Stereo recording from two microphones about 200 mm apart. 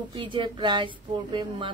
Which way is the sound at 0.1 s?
25° right (ahead or behind).